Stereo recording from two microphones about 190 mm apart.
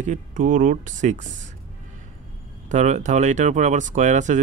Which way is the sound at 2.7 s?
40° right (ahead or behind).